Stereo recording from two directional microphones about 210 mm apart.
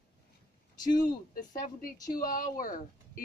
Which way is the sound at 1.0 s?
40° left (ahead or behind).